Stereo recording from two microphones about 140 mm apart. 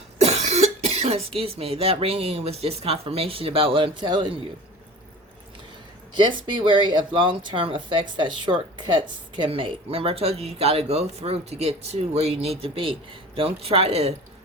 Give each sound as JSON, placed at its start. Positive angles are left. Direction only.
{"t": 0.2, "sound": "speech", "side_deg": -50}
{"t": 6.1, "sound": "speech", "side_deg": -35}